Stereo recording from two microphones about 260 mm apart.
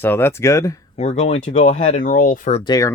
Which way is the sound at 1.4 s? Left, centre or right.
Left.